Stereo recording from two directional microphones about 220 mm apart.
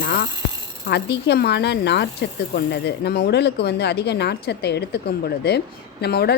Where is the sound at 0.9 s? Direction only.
50° left (ahead or behind).